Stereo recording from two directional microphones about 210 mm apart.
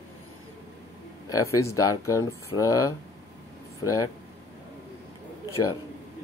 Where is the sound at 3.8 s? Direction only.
15° left (ahead or behind).